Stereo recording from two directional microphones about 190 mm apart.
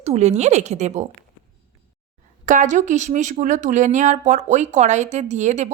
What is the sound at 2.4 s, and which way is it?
Speech, 40° right (ahead or behind).